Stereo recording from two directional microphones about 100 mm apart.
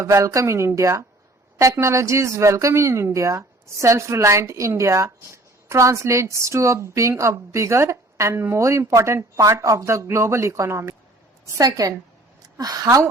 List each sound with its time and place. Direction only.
0.0 s a woman's voice: 30° right (ahead or behind)